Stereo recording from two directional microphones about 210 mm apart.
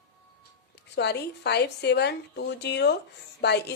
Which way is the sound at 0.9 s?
50° left (ahead or behind).